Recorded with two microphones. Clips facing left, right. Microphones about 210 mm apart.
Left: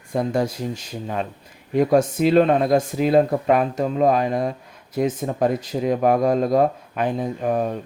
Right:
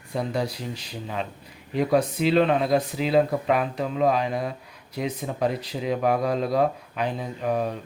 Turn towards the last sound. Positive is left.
turn(degrees=45)  # may be behind; listen again after turning